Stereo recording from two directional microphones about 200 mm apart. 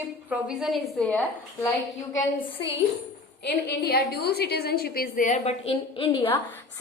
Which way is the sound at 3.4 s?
50° left (ahead or behind).